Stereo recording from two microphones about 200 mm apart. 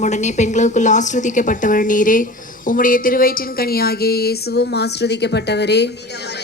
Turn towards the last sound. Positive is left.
turn(degrees=55)  # may be behind; listen again after turning